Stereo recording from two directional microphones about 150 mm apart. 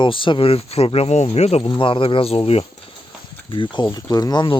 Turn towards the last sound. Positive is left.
turn(degrees=30)  # may be behind; listen again after turning